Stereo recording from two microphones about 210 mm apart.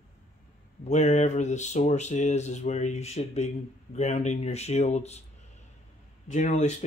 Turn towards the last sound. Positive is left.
turn(degrees=35)  # may be behind; listen again after turning